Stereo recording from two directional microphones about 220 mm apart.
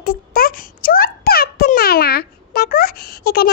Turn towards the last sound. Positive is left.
turn(degrees=45)  # may be behind; listen again after turning